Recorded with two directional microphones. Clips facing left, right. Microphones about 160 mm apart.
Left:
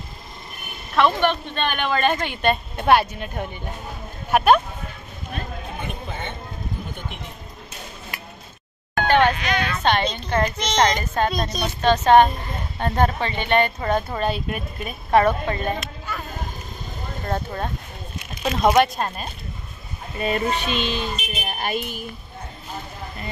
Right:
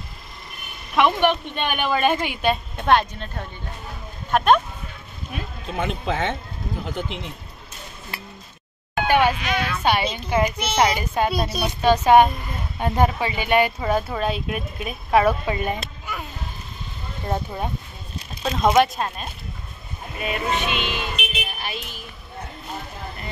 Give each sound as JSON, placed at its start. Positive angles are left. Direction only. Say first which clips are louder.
{"t": 0.9, "sound": "a child's voice", "louder": "even", "side_deg": -15}
{"t": 5.8, "sound": "a man's voice", "louder": "right 11 dB", "side_deg": -90}
{"t": 8.1, "sound": "a sound", "louder": "right 5 dB", "side_deg": -30}
{"t": 8.9, "sound": "a child's voice", "louder": "left 1 dB", "side_deg": -10}
{"t": 18.4, "sound": "speech", "louder": "even", "side_deg": 5}
{"t": 20.2, "sound": "child singing", "louder": "left 2 dB", "side_deg": 35}
{"t": 21.5, "sound": "speech", "louder": "left 6 dB", "side_deg": 50}